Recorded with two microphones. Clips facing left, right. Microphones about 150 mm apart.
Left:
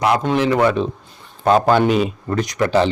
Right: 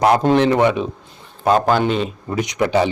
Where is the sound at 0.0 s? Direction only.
40° right (ahead or behind).